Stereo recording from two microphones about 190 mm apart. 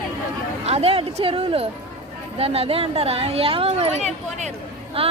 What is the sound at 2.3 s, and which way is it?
Speech, 30° right (ahead or behind).